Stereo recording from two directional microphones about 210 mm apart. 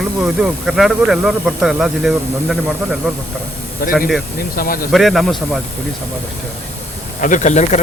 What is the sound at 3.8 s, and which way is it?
Speech, 45° left (ahead or behind).